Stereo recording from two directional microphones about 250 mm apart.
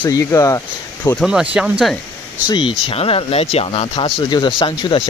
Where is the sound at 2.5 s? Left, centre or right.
Centre.